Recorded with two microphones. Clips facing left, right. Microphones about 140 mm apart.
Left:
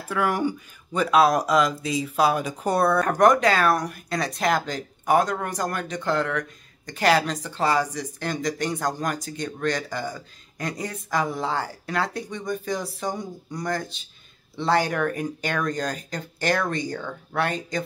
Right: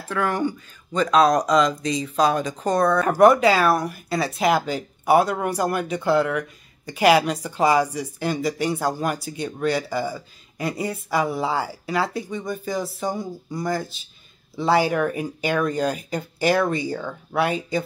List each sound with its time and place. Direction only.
0.0 s speech: 10° left (ahead or behind)
3.0 s speech: 5° right (ahead or behind)